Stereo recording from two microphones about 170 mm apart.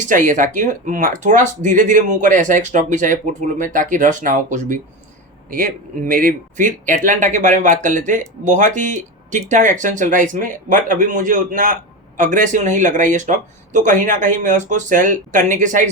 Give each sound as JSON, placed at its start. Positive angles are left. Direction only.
{"t": 0.0, "sound": "speech", "side_deg": -50}